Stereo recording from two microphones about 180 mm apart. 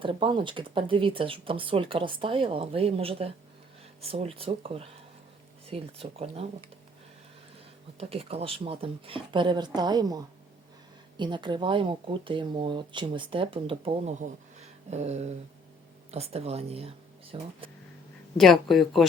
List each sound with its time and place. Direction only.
0.0 s speech: 30° right (ahead or behind)
7.9 s speech: 35° right (ahead or behind)
18.3 s speech: centre (ahead or behind)